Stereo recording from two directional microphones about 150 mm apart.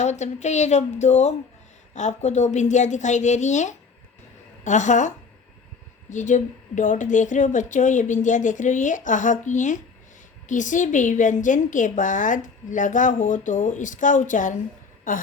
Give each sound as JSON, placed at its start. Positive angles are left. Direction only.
{"t": 0.0, "sound": "a woman's voice", "side_deg": 50}